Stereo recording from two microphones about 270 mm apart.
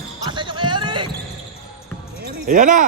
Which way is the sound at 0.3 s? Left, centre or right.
Centre.